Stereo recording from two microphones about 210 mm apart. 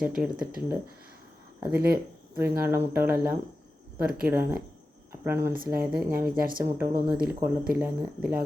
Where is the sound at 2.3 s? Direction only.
10° right (ahead or behind).